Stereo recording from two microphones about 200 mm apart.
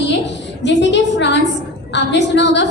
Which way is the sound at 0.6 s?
60° left (ahead or behind).